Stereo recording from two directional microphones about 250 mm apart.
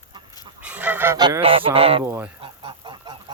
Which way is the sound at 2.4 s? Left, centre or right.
Centre.